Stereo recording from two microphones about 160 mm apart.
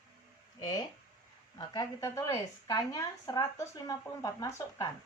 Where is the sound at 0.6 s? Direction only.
25° left (ahead or behind).